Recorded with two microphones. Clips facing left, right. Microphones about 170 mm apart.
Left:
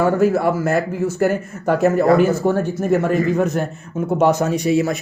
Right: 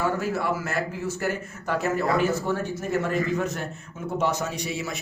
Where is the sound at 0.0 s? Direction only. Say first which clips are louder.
Left 10 dB; 50° left (ahead or behind).